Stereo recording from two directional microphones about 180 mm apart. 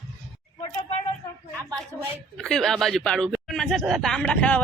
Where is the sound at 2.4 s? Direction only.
Centre (ahead or behind).